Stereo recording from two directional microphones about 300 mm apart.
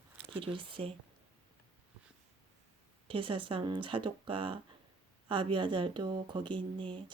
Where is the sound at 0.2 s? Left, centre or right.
Centre.